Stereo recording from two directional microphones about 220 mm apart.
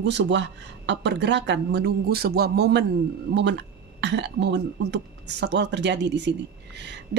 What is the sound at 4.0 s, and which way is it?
Speech, 50° right (ahead or behind).